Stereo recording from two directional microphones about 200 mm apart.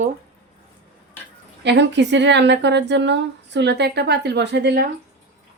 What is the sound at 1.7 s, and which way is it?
A woman's voice, 60° right (ahead or behind).